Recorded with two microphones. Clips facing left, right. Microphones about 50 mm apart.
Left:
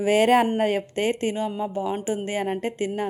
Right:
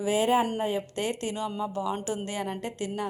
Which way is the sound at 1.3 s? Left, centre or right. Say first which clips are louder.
Left 4 dB; left.